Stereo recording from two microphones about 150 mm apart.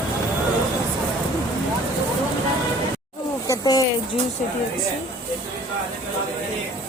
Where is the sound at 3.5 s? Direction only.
25° left (ahead or behind).